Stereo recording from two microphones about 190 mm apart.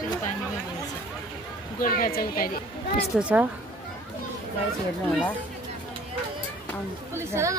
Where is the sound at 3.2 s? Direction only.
5° right (ahead or behind).